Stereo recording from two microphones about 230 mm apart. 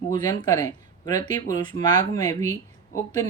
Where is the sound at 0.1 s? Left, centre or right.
Centre.